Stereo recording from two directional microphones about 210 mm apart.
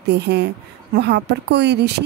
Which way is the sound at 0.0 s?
55° right (ahead or behind).